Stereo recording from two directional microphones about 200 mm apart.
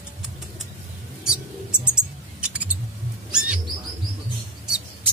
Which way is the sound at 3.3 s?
5° right (ahead or behind).